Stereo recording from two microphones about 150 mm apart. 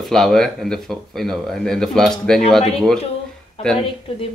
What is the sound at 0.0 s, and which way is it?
Speech, centre (ahead or behind).